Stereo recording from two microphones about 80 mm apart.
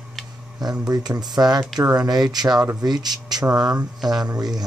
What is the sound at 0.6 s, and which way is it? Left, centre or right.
Speech, right.